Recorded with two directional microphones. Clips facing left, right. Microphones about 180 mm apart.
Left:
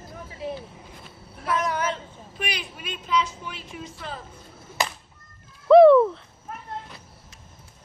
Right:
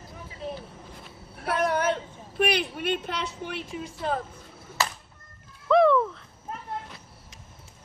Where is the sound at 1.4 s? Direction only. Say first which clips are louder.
Right 1 dB; 60° right (ahead or behind).